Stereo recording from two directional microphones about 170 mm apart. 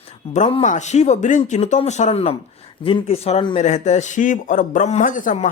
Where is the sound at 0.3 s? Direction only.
40° left (ahead or behind).